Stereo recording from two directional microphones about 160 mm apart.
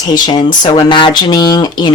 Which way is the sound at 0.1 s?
25° left (ahead or behind).